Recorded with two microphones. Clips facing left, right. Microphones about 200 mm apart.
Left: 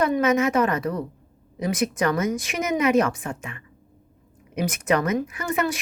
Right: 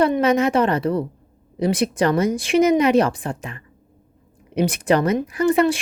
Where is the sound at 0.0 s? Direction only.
30° right (ahead or behind).